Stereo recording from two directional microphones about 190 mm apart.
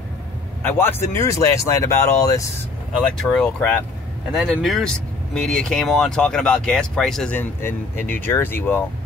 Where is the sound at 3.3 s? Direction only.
5° left (ahead or behind).